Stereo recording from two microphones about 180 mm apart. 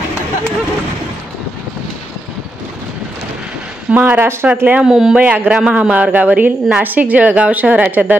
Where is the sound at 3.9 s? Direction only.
10° right (ahead or behind).